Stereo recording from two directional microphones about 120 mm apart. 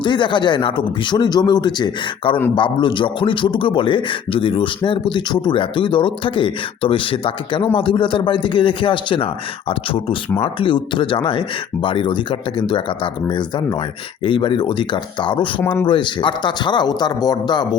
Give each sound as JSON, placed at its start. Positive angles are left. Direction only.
{"t": 0.0, "sound": "a man's voice", "side_deg": 40}
{"t": 15.6, "sound": "speech", "side_deg": 15}
{"t": 15.9, "sound": "speech", "side_deg": 40}